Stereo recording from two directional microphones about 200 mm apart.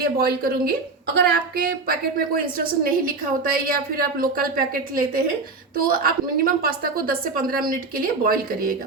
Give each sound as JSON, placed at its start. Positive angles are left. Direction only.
{"t": 0.0, "sound": "a woman's voice", "side_deg": -50}
{"t": 1.9, "sound": "a woman's voice", "side_deg": -45}